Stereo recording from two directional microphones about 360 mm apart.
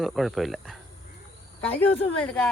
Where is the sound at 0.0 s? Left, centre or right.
Centre.